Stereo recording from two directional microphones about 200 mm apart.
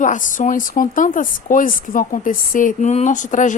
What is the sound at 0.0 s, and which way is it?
Speech, 40° left (ahead or behind).